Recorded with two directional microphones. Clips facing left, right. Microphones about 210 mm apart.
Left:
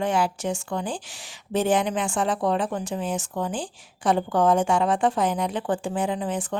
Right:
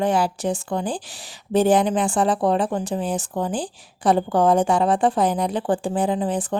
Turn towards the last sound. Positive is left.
turn(degrees=-35)  # may be behind; listen again after turning